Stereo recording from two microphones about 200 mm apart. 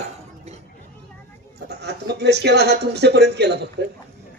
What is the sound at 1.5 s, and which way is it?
Speech, 55° right (ahead or behind).